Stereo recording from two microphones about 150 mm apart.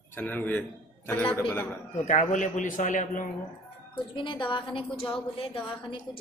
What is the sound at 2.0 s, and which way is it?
A man's voice, 55° left (ahead or behind).